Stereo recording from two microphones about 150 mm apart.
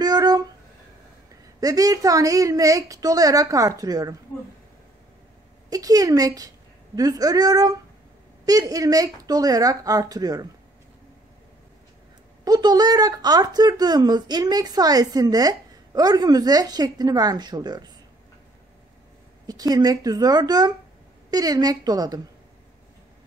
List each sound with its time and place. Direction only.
0.0 s a sound: 25° right (ahead or behind)
1.6 s speech: 25° right (ahead or behind)
5.7 s speech: 25° right (ahead or behind)
12.4 s speech: 25° right (ahead or behind)
19.4 s speech: 25° right (ahead or behind)